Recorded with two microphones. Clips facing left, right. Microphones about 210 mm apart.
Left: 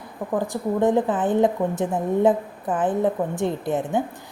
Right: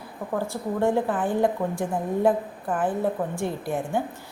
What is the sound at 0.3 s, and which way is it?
A woman's voice, 15° left (ahead or behind).